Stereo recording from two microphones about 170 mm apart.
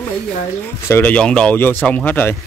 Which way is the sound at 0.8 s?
10° left (ahead or behind).